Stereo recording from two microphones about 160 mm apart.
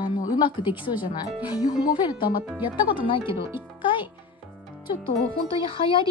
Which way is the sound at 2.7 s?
30° left (ahead or behind).